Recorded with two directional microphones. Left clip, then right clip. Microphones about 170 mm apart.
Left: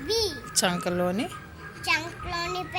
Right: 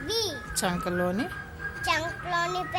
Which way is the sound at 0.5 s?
Centre (ahead or behind).